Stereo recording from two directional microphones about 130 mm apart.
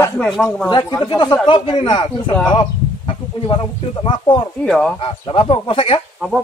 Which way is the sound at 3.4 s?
40° left (ahead or behind).